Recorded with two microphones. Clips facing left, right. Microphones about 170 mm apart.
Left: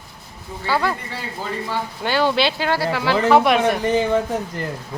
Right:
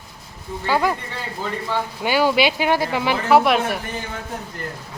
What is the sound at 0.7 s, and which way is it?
Speech, 15° right (ahead or behind).